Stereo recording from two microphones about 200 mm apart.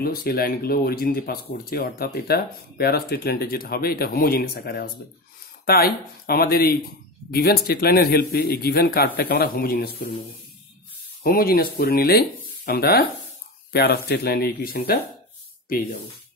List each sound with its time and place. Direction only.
0.0 s speech: 50° left (ahead or behind)
11.2 s speech: 50° left (ahead or behind)